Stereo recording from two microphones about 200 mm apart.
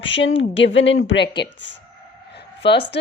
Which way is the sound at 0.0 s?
65° left (ahead or behind).